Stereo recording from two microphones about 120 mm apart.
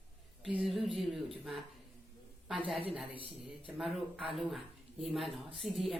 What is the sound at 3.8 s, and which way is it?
Speech, centre (ahead or behind).